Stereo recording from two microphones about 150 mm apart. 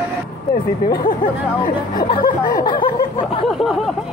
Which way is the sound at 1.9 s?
35° left (ahead or behind).